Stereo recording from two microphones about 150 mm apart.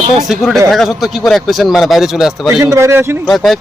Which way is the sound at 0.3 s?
Centre (ahead or behind).